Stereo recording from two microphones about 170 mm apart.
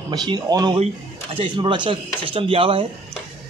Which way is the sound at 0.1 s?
25° right (ahead or behind).